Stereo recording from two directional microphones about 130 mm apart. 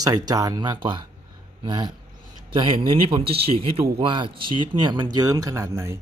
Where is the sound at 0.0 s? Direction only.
30° right (ahead or behind).